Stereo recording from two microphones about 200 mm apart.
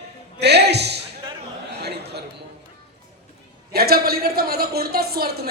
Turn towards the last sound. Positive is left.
turn(degrees=-50)  # may be behind; listen again after turning